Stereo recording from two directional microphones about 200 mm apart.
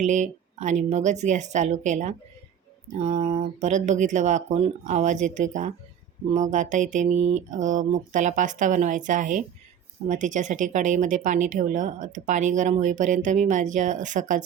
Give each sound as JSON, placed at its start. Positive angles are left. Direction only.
{"t": 0.0, "sound": "speech", "side_deg": -35}